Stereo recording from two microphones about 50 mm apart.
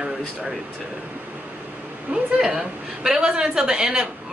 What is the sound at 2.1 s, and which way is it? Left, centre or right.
A woman's voice, centre.